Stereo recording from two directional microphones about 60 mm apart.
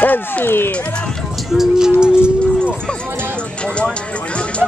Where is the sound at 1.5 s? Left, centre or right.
Centre.